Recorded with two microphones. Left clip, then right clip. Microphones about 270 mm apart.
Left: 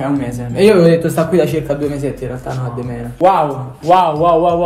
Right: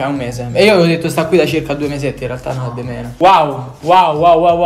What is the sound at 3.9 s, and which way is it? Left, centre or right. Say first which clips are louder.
Speech: right 2 dB; centre.